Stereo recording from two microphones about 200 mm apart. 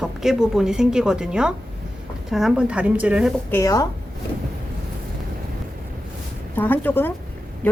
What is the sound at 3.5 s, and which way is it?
Speech, 15° left (ahead or behind).